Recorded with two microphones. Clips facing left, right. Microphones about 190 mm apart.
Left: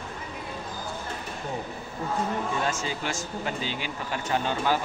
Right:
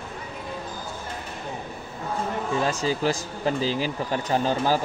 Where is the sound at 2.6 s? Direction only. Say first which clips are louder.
Right 6 dB; 35° right (ahead or behind).